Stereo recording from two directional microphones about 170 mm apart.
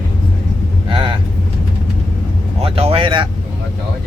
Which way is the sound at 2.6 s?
35° right (ahead or behind).